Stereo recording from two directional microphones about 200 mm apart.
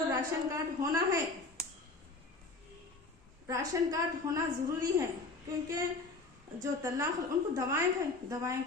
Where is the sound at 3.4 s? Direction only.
15° right (ahead or behind).